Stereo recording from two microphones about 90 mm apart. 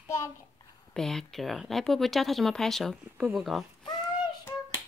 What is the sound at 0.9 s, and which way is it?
Speech, 5° left (ahead or behind).